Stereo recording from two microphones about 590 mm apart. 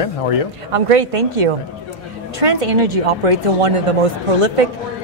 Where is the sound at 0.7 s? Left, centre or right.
Right.